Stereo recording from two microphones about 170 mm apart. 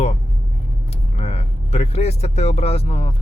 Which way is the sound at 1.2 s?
40° left (ahead or behind).